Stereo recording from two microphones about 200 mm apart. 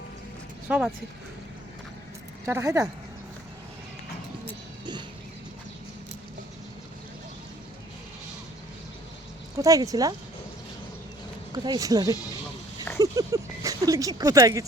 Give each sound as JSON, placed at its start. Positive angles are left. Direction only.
{"t": 0.7, "sound": "speech", "side_deg": -5}
{"t": 2.5, "sound": "speech", "side_deg": -15}
{"t": 9.6, "sound": "speech", "side_deg": -15}
{"t": 11.5, "sound": "speech", "side_deg": -20}